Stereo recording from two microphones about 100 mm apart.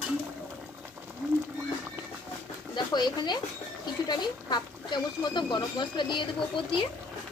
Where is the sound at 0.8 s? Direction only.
15° right (ahead or behind).